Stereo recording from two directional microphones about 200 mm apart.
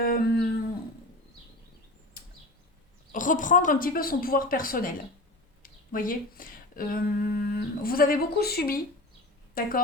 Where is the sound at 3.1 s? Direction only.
40° left (ahead or behind).